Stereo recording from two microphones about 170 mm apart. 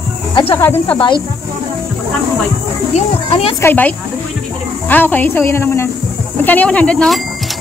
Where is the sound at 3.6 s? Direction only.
10° left (ahead or behind).